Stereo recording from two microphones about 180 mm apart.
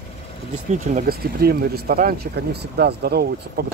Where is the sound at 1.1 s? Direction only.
60° right (ahead or behind).